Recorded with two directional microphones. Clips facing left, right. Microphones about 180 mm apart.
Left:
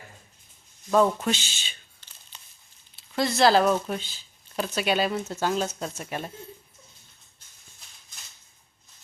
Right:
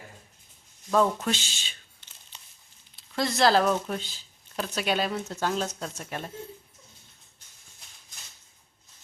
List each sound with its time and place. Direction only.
0.9 s speech: 5° left (ahead or behind)
2.3 s crumpling: 20° right (ahead or behind)
2.9 s speech: centre (ahead or behind)